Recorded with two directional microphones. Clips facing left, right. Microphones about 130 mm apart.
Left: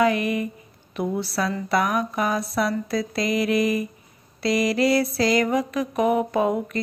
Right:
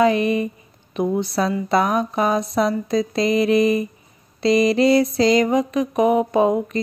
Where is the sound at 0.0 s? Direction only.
25° right (ahead or behind).